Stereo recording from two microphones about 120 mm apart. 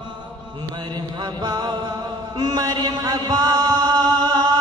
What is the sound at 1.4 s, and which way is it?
Mantra, 35° right (ahead or behind).